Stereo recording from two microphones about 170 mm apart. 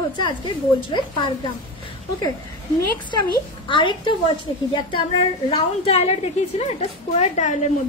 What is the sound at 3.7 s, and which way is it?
A woman's voice, 30° left (ahead or behind).